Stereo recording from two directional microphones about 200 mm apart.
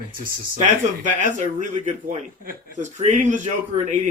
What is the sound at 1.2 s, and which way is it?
A man's voice, 40° right (ahead or behind).